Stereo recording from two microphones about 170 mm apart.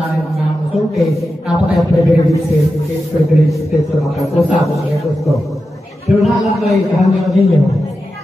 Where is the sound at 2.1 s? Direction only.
20° left (ahead or behind).